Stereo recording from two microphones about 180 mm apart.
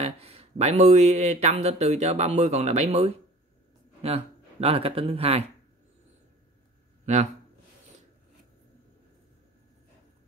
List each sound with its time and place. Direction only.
0.0 s speech: 35° right (ahead or behind)
7.1 s speech: 40° right (ahead or behind)